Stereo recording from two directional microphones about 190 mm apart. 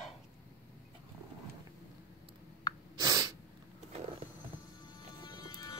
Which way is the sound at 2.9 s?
20° right (ahead or behind).